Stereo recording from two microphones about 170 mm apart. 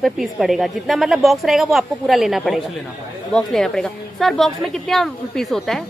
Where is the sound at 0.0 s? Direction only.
Centre (ahead or behind).